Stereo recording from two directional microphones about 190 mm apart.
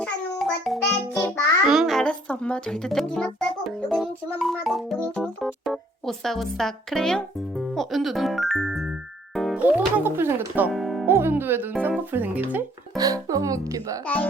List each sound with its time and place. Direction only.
0.0 s music: centre (ahead or behind)
5.1 s speech: centre (ahead or behind)
11.0 s speech: 10° right (ahead or behind)
14.0 s speech: 5° left (ahead or behind)